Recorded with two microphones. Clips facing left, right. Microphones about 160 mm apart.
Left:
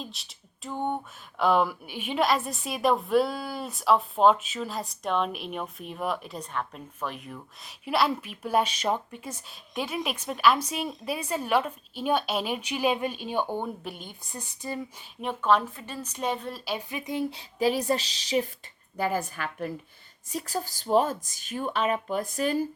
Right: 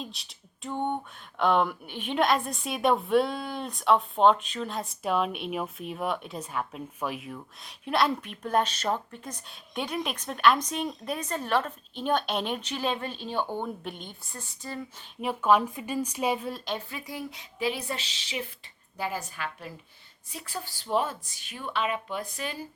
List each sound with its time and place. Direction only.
0.0 s a sound: centre (ahead or behind)
1.4 s a woman's voice: 5° left (ahead or behind)
15.2 s a woman's voice: 5° right (ahead or behind)
16.9 s speech: 20° left (ahead or behind)
17.6 s speech: 40° left (ahead or behind)
18.9 s a woman's voice: 50° left (ahead or behind)
20.3 s speech: 40° left (ahead or behind)